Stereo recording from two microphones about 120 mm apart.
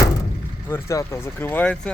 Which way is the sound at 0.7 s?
25° left (ahead or behind).